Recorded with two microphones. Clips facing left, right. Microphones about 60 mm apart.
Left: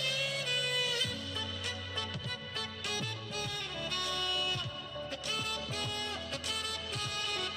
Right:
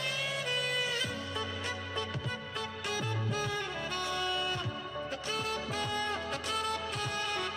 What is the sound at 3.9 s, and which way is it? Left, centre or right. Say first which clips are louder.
Saxophone: right 2 dB; right.